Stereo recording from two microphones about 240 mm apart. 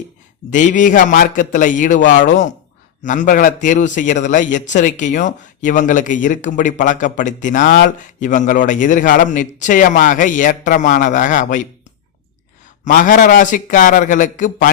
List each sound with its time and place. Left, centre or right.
0.5 s a man's voice: left
12.8 s a man's voice: left